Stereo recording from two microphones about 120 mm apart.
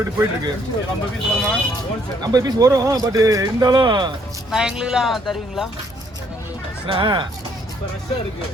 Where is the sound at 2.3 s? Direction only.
30° right (ahead or behind).